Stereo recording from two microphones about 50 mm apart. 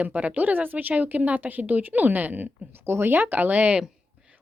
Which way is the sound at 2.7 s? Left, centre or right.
Right.